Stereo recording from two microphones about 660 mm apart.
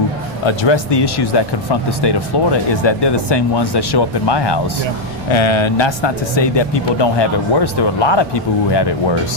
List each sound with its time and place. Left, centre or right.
0.4 s speech: left